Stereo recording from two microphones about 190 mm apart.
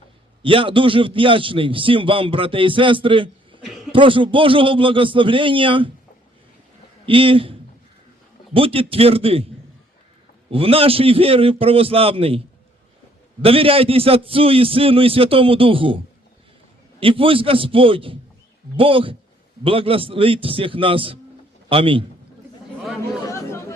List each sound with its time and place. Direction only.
0.4 s a man's voice: 25° right (ahead or behind)
7.0 s a man's voice: 30° right (ahead or behind)
8.5 s a man's voice: 30° right (ahead or behind)
10.5 s a man's voice: 30° right (ahead or behind)
13.4 s a man's voice: 30° right (ahead or behind)
17.0 s a man's voice: 30° right (ahead or behind)
23.3 s chatter: 15° left (ahead or behind)